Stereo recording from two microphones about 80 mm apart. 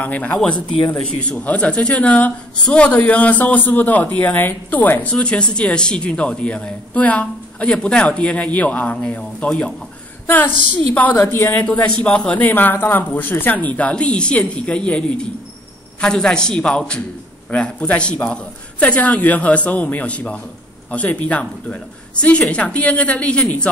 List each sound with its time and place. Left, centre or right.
0.0 s speech: centre
0.4 s speech: centre
10.2 s a woman's voice: left